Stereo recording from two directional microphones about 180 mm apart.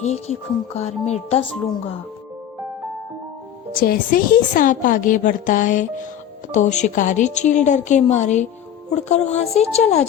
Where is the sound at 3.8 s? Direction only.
50° left (ahead or behind).